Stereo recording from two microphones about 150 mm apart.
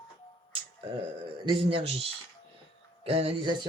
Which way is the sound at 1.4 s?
35° right (ahead or behind).